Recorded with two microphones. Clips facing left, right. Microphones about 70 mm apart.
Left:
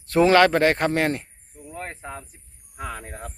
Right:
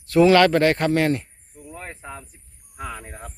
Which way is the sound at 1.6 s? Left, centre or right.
Left.